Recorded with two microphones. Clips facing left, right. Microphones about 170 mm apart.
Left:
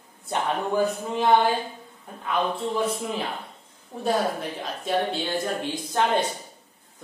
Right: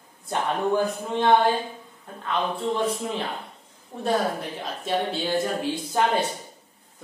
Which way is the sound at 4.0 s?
Centre (ahead or behind).